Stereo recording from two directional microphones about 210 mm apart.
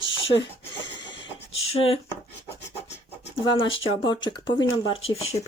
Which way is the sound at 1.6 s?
30° left (ahead or behind).